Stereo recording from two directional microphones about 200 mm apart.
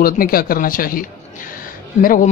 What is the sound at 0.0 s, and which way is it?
A man's voice, 45° left (ahead or behind).